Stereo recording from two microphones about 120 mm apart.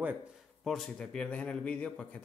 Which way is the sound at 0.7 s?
5° left (ahead or behind).